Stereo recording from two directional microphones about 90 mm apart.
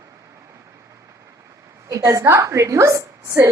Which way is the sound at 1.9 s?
40° right (ahead or behind).